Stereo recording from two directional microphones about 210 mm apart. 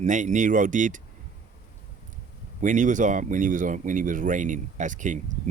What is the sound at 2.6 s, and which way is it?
Speech, 35° right (ahead or behind).